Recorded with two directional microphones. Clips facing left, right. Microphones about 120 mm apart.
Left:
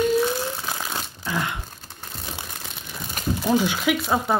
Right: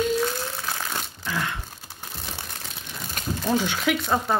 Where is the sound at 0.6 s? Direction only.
15° left (ahead or behind).